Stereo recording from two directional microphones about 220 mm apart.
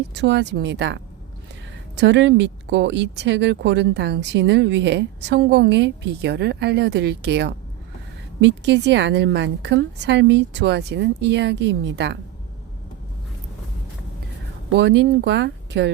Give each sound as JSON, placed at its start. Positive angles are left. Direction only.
{"t": 0.1, "sound": "speech", "side_deg": -55}
{"t": 2.0, "sound": "speech", "side_deg": -55}
{"t": 14.7, "sound": "speech", "side_deg": -50}